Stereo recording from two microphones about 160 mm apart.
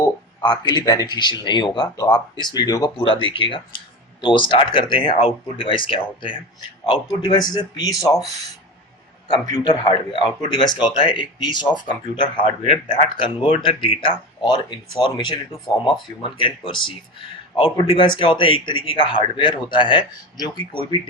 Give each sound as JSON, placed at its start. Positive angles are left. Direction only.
{"t": 0.0, "sound": "a man's voice", "side_deg": 25}
{"t": 9.3, "sound": "a man's voice", "side_deg": 25}
{"t": 17.6, "sound": "a man's voice", "side_deg": 30}